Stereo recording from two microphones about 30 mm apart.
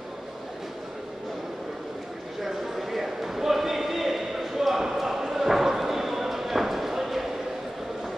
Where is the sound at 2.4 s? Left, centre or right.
Centre.